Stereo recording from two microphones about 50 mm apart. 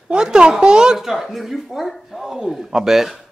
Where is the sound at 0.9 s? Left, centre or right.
Centre.